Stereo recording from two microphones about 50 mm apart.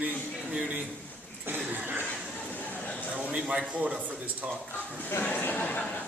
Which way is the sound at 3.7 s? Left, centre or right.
Right.